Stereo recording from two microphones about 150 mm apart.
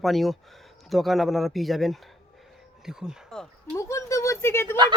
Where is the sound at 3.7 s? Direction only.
20° left (ahead or behind).